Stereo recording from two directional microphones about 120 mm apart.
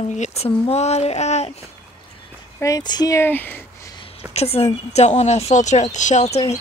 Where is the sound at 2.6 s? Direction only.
30° left (ahead or behind).